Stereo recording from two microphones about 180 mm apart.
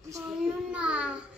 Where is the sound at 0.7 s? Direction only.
5° right (ahead or behind).